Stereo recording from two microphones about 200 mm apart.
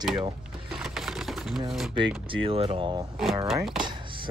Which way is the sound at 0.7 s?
Centre (ahead or behind).